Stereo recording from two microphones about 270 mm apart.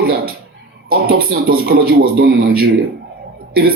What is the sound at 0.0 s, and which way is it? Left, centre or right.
Speech, right.